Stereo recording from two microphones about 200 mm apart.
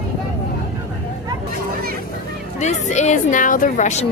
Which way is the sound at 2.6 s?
35° left (ahead or behind).